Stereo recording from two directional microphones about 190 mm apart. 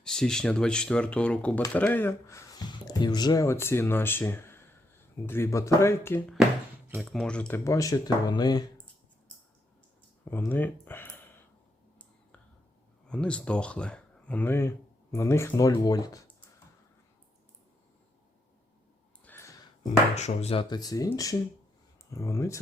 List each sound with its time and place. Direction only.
0.0 s speech: 5° left (ahead or behind)
6.8 s speech: 5° right (ahead or behind); by 8.6 s 20° left (ahead or behind)
10.2 s speech: 10° left (ahead or behind)
13.1 s speech: 5° left (ahead or behind)
19.2 s a sound: 10° left (ahead or behind)
20.1 s speech: 35° left (ahead or behind); by 22.6 s 15° left (ahead or behind)